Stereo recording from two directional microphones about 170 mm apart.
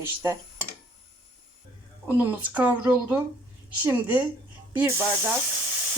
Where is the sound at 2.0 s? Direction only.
10° right (ahead or behind).